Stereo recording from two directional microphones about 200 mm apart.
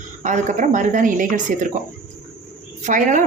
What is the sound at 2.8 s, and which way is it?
Speech, 40° right (ahead or behind).